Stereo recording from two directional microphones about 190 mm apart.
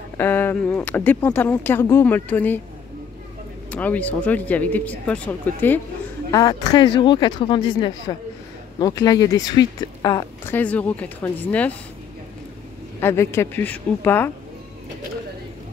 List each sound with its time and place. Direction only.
0.2 s speech: 10° left (ahead or behind)
3.7 s speech: 10° left (ahead or behind)
6.3 s speech: 20° left (ahead or behind)
13.0 s speech: 15° left (ahead or behind)